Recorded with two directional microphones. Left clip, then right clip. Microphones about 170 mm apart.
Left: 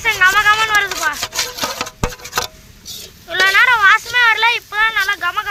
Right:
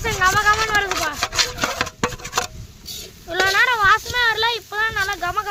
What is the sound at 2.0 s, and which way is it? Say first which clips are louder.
Tick-tock: left 1 dB; centre (ahead or behind).